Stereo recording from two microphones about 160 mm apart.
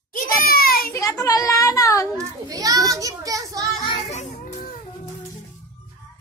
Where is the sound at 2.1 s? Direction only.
20° right (ahead or behind).